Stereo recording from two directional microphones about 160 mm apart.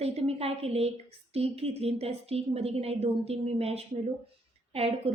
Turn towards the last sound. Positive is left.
turn(degrees=-40)  # may be behind; listen again after turning